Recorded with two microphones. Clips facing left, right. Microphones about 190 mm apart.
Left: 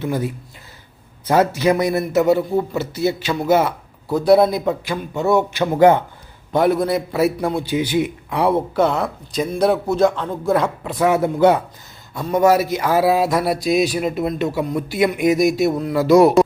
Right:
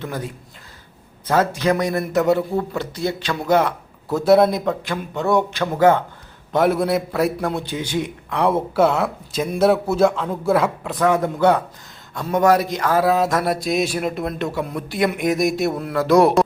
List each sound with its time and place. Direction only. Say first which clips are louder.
0.0 s a man's voice: left 6 dB; 10° left (ahead or behind)
5.5 s a man's voice: left 4 dB; 15° left (ahead or behind)
6.5 s a man's voice: left 1 dB; centre (ahead or behind)
8.5 s a man's voice: even; 5° right (ahead or behind)
11.0 s a man's voice: left 2 dB; 10° left (ahead or behind)